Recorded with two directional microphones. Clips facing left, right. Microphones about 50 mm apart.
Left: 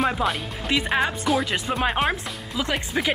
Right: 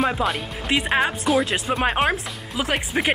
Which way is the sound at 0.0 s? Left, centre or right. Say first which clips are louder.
Right 1 dB; centre.